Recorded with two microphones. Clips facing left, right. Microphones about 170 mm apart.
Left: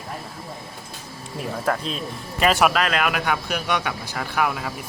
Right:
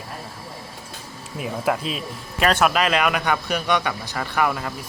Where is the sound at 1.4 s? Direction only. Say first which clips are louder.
Right 1 dB; 5° right (ahead or behind).